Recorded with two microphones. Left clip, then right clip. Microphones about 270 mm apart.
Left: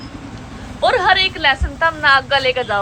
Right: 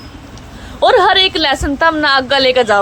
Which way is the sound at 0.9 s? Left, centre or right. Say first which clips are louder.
Right 4 dB; right.